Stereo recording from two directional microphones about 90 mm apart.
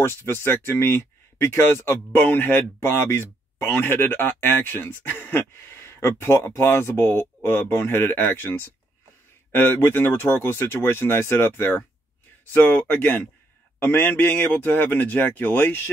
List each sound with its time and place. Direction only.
0.0 s speech: 25° left (ahead or behind)